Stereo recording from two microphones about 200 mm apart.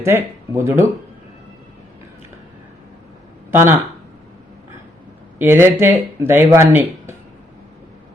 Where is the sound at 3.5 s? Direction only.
10° right (ahead or behind).